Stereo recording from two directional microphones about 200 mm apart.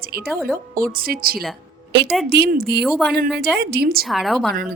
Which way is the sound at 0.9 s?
45° right (ahead or behind).